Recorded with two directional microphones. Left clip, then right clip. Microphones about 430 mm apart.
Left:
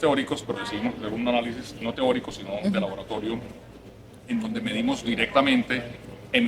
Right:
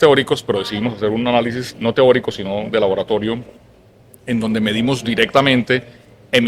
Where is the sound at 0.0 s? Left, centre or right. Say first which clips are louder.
Right 11 dB; right.